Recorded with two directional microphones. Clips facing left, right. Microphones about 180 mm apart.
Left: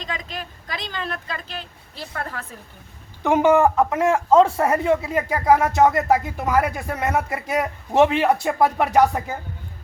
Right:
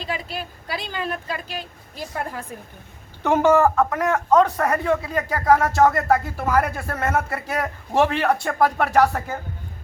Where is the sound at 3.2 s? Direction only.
15° left (ahead or behind).